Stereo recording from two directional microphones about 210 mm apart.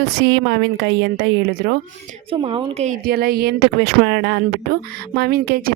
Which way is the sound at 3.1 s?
45° right (ahead or behind).